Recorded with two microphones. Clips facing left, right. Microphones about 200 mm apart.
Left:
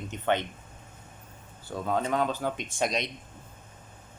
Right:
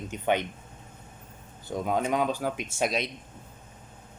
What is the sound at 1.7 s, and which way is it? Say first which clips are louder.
Speech: right 1 dB; 15° right (ahead or behind).